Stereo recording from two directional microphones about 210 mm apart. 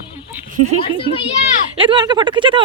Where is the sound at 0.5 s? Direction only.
35° right (ahead or behind).